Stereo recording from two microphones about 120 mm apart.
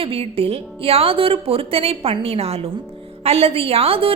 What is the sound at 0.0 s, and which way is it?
A woman's voice, 50° right (ahead or behind).